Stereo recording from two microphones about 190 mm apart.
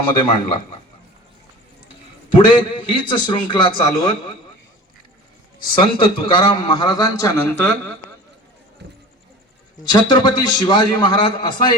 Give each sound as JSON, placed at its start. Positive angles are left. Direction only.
{"t": 0.3, "sound": "a man's voice", "side_deg": 25}
{"t": 2.3, "sound": "a man's voice", "side_deg": 25}
{"t": 5.7, "sound": "a man's voice", "side_deg": 25}
{"t": 8.8, "sound": "music", "side_deg": -60}
{"t": 9.9, "sound": "a man's voice", "side_deg": 25}